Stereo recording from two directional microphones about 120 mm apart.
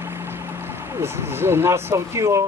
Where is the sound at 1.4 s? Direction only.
20° right (ahead or behind).